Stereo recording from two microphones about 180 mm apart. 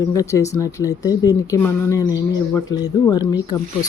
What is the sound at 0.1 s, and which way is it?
Speech, 15° left (ahead or behind).